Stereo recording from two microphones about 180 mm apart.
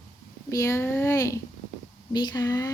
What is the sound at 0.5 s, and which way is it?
A woman's voice, 15° left (ahead or behind).